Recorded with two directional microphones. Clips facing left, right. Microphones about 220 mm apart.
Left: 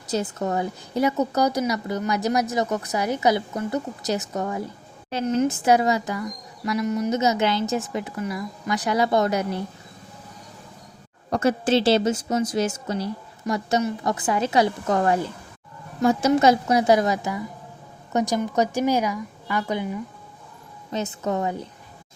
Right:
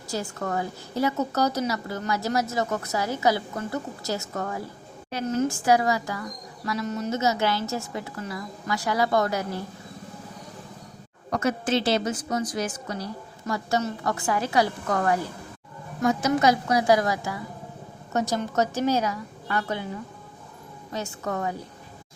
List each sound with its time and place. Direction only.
0.1 s a woman's voice: 20° left (ahead or behind)
11.3 s a woman's voice: 30° left (ahead or behind)